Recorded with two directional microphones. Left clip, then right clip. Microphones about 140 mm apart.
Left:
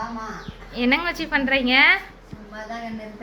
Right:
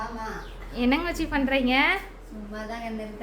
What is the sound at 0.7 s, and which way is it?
A woman's voice, 15° right (ahead or behind).